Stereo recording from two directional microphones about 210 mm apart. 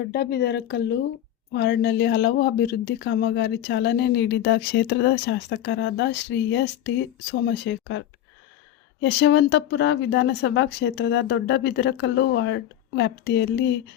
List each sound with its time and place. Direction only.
0.0 s speech: 50° left (ahead or behind)